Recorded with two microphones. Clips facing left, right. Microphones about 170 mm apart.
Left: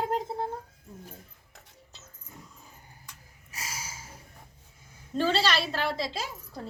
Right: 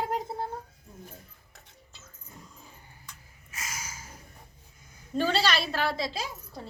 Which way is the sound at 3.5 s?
30° left (ahead or behind).